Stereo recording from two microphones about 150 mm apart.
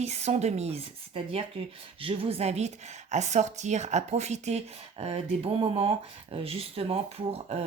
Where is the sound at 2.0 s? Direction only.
35° right (ahead or behind).